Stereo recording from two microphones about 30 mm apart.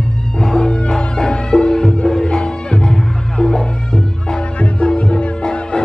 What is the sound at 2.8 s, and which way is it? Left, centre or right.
Music, centre.